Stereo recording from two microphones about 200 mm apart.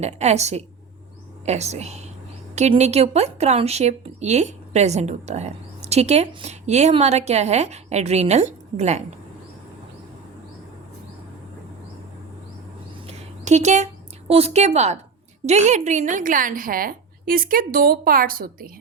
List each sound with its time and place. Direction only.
0.0 s a woman's voice: 35° right (ahead or behind)
13.1 s a sound: 35° right (ahead or behind)
14.3 s a woman's voice: 30° right (ahead or behind); by 18.7 s 45° right (ahead or behind)